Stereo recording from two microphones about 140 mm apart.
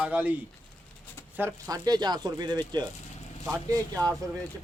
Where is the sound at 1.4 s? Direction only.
20° right (ahead or behind).